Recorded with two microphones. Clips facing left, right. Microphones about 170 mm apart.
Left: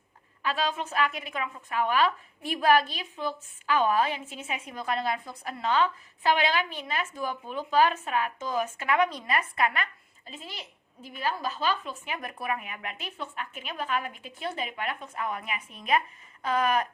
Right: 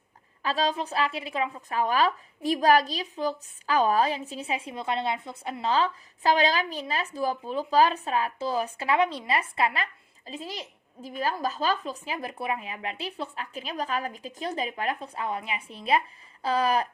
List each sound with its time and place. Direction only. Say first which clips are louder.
0.4 s a woman's voice: right 3 dB; 35° right (ahead or behind)